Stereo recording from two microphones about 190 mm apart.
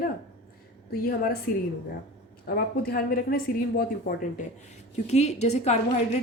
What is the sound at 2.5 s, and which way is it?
Speech, 50° left (ahead or behind).